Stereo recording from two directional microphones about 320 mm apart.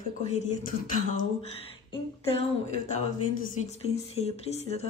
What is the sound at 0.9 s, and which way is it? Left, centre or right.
Speech, left.